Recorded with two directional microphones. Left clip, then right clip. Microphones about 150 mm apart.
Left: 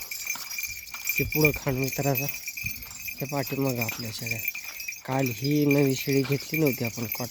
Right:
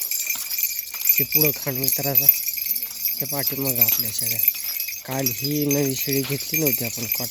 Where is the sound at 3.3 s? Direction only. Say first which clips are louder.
Even; 10° left (ahead or behind).